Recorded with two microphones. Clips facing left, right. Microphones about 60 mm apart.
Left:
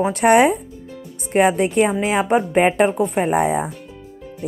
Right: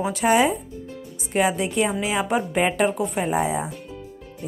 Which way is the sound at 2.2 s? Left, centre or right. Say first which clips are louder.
Left 7 dB; left.